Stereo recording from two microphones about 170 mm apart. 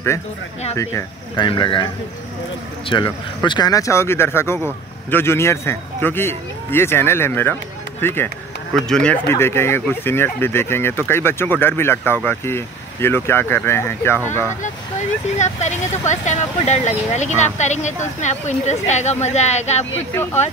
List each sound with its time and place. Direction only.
1.3 s a man's voice: 30° left (ahead or behind)
2.9 s speech: 25° left (ahead or behind)
14.6 s speech: 45° left (ahead or behind)